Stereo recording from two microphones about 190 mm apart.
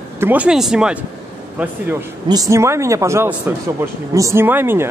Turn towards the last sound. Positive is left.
turn(degrees=-10)  # may be behind; listen again after turning